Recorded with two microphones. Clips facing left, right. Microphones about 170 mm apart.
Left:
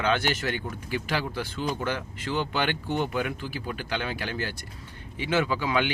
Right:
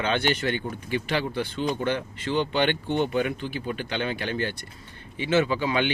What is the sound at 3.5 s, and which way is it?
Speech, 10° left (ahead or behind).